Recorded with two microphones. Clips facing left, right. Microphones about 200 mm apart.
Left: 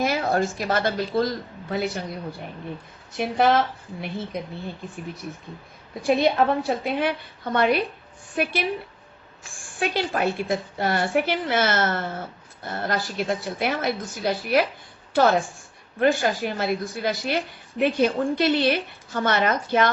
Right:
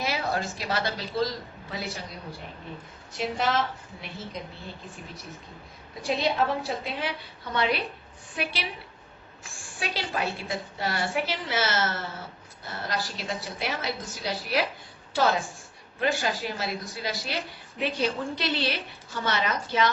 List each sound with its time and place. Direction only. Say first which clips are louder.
0.0 s a woman's voice: left 7 dB; 50° left (ahead or behind)
3.2 s a woman's voice: left 7 dB; 55° left (ahead or behind)
6.0 s a woman's voice: left 6 dB; 55° left (ahead or behind)
9.8 s a woman's voice: left 7 dB; 55° left (ahead or behind)